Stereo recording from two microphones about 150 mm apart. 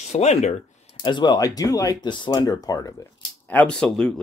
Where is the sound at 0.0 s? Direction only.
45° left (ahead or behind).